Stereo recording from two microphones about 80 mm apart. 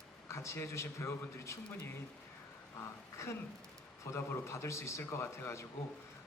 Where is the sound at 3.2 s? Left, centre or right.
Left.